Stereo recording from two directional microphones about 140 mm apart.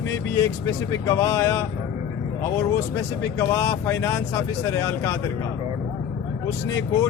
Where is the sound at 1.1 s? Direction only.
20° left (ahead or behind).